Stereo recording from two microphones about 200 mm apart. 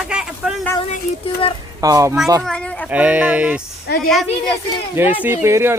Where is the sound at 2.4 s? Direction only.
5° left (ahead or behind).